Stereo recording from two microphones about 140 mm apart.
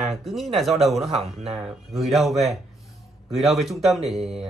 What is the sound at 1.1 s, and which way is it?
Speech, 45° right (ahead or behind).